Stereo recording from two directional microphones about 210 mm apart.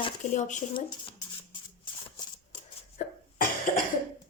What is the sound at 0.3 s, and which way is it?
Speech, 35° left (ahead or behind).